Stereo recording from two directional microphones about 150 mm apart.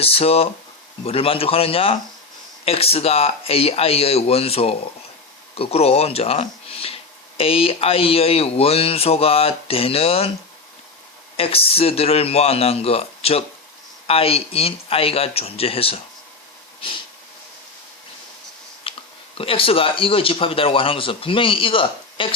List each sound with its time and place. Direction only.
0.0 s speech: 40° left (ahead or behind)
11.3 s speech: 40° left (ahead or behind)
18.9 s finger snapping: 35° left (ahead or behind)
19.4 s speech: 40° left (ahead or behind)